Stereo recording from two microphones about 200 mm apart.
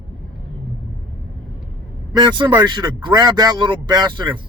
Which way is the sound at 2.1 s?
20° right (ahead or behind).